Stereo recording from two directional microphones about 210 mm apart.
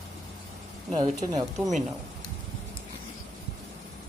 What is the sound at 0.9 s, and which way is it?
Speech, 30° right (ahead or behind).